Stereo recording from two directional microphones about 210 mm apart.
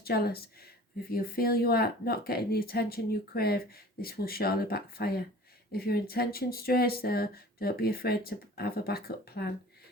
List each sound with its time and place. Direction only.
0.0 s speech: 45° left (ahead or behind)